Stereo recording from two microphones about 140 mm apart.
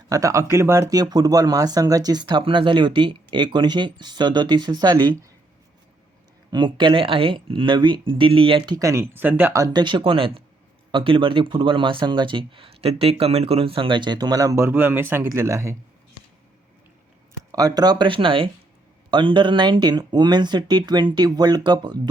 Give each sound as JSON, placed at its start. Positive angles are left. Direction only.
{"t": 0.1, "sound": "speech", "side_deg": -25}
{"t": 6.5, "sound": "speech", "side_deg": -35}
{"t": 9.6, "sound": "speech", "side_deg": -30}
{"t": 17.5, "sound": "speech", "side_deg": -25}